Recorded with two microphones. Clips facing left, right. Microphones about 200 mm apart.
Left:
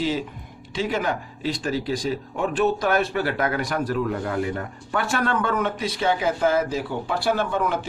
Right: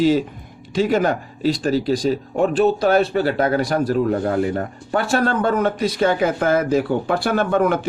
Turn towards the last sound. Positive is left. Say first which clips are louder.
# right 5 dB
turn(degrees=-55)  # may be behind; listen again after turning